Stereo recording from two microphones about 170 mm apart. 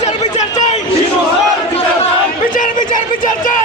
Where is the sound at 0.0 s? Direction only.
40° left (ahead or behind).